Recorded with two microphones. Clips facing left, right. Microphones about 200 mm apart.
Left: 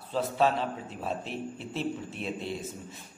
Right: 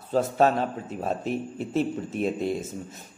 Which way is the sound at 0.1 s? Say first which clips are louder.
Right 5 dB; 45° right (ahead or behind).